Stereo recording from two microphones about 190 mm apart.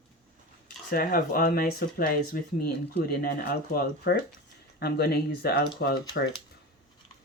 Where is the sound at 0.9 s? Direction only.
50° left (ahead or behind).